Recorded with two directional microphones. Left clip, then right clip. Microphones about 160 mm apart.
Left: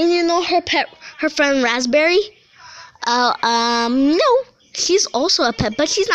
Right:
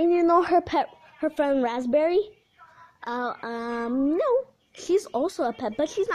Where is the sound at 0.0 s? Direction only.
5° right (ahead or behind).